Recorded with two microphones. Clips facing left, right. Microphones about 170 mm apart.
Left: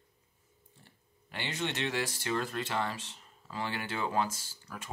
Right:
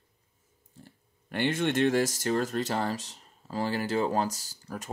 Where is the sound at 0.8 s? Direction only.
50° right (ahead or behind).